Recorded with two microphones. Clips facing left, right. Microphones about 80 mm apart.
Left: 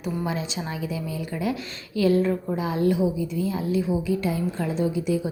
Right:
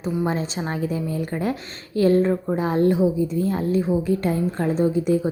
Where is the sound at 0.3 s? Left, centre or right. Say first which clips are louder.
Right 4 dB; right.